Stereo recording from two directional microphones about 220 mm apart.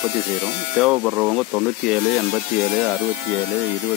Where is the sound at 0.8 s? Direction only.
5° right (ahead or behind).